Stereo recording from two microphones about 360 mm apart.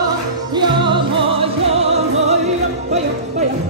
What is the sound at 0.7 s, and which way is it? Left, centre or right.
Music, centre.